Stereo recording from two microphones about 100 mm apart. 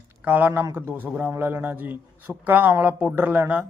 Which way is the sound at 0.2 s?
20° right (ahead or behind).